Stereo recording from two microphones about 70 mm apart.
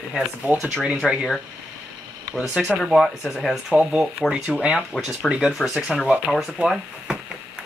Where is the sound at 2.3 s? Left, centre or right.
Centre.